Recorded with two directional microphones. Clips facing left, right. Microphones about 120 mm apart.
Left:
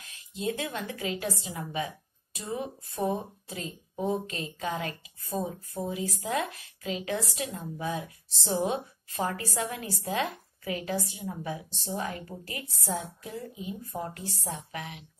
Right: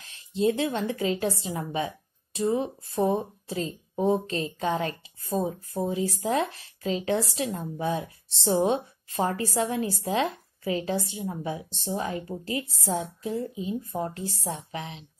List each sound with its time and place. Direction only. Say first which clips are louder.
0.0 s a woman's voice: right 8 dB; 30° right (ahead or behind)